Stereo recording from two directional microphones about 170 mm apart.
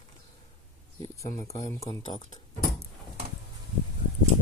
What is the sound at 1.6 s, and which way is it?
Speech, 20° left (ahead or behind).